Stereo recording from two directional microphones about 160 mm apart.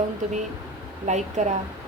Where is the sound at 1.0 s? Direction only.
45° right (ahead or behind).